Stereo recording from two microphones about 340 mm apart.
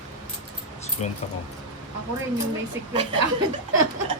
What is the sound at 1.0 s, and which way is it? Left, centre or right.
Speech, centre.